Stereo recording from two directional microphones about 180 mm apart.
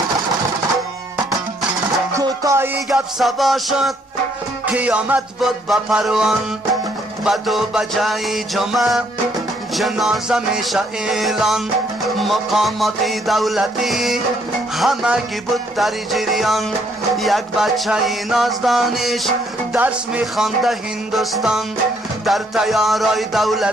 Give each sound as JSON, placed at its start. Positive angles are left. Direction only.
{"t": 2.1, "sound": "music", "side_deg": -15}
{"t": 2.9, "sound": "music", "side_deg": 0}